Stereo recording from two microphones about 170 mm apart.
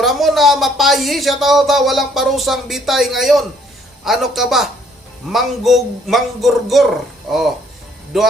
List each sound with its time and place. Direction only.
0.0 s speech: centre (ahead or behind)